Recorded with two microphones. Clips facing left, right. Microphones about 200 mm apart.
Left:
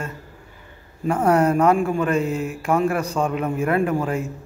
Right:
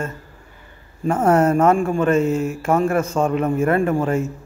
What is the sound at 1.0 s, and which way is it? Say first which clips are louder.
A man's voice: right 2 dB; centre (ahead or behind).